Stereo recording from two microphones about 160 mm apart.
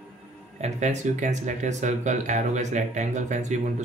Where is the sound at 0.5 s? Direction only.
45° right (ahead or behind).